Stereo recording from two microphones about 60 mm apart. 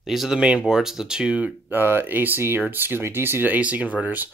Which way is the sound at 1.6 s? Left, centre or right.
Right.